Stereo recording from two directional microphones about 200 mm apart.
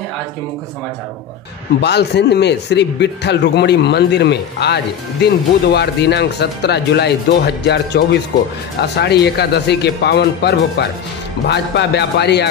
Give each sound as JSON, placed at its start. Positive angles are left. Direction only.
{"t": 1.8, "sound": "speech", "side_deg": 55}